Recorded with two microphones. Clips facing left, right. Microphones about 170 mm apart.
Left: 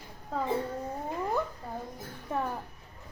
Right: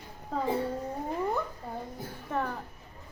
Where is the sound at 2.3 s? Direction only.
10° left (ahead or behind).